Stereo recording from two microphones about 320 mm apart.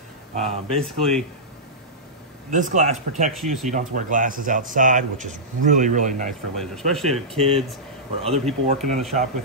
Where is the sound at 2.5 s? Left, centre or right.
Right.